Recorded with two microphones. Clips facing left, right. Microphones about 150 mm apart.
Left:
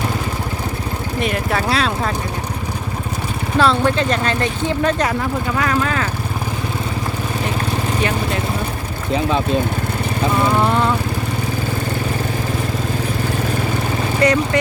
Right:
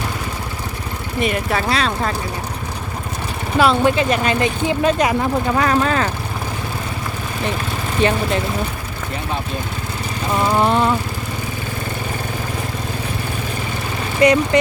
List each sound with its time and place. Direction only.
1.2 s speech: centre (ahead or behind)
3.6 s speech: 15° right (ahead or behind)
5.5 s speech: 35° right (ahead or behind)
8.0 s speech: 30° right (ahead or behind)
10.7 s speech: 15° right (ahead or behind)
14.2 s speech: 15° right (ahead or behind)